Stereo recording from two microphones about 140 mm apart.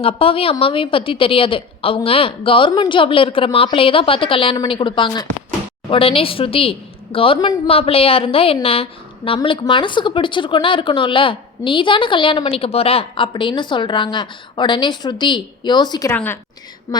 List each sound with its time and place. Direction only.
0.0 s a woman's voice: 40° left (ahead or behind)
16.0 s a woman's voice: 15° left (ahead or behind)